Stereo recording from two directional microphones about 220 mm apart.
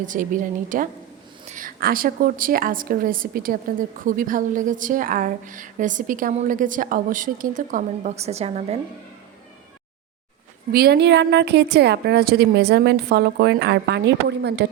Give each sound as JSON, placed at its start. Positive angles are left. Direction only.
{"t": 0.0, "sound": "a woman's voice", "side_deg": -35}
{"t": 10.7, "sound": "a woman's voice", "side_deg": -45}